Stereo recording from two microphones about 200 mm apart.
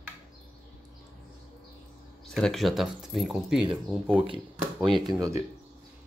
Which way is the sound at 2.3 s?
Centre (ahead or behind).